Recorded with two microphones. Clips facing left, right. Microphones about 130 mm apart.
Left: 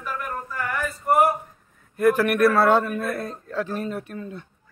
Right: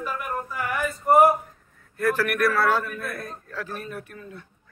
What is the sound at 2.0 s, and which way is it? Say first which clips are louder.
A man's voice: left 5 dB; 20° left (ahead or behind).